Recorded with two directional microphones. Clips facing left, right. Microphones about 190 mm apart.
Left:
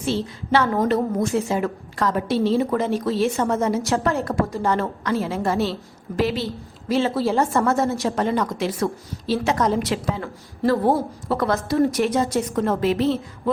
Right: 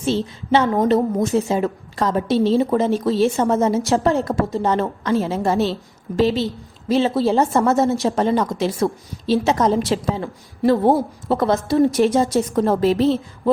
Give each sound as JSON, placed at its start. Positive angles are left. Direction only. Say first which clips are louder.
{"t": 0.0, "sound": "a woman's voice", "louder": "right 3 dB", "side_deg": -25}